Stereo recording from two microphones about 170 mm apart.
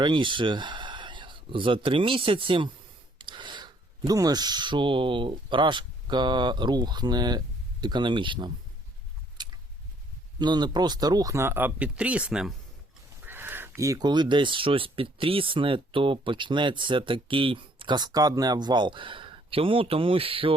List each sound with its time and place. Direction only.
0.0 s speech: 30° right (ahead or behind)
9.4 s a sound: 25° right (ahead or behind)
10.3 s speech: 25° right (ahead or behind)